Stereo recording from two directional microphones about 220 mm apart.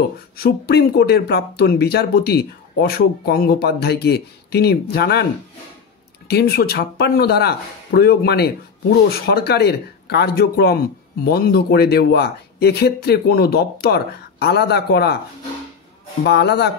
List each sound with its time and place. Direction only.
0.4 s speech: 45° left (ahead or behind)
6.2 s speech: 45° left (ahead or behind)
16.3 s speech: 50° left (ahead or behind)